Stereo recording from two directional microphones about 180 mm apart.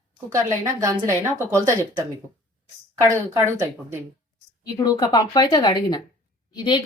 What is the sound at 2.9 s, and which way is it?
Speech, 15° right (ahead or behind).